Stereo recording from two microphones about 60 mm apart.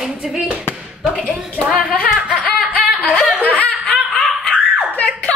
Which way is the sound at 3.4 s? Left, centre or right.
Left.